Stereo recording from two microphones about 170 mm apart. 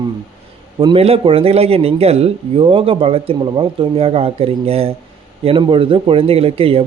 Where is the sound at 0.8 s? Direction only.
30° right (ahead or behind).